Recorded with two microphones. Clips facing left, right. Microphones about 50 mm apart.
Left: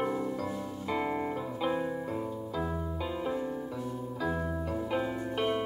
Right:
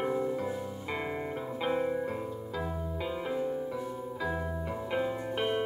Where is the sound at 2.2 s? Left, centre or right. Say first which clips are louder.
Left 1 dB; centre.